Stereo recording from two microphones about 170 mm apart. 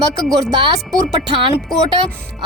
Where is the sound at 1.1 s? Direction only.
30° right (ahead or behind).